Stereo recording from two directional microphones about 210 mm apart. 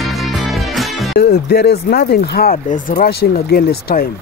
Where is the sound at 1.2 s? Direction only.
50° left (ahead or behind).